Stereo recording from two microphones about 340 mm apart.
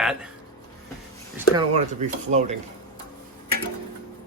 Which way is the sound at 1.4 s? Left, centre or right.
Centre.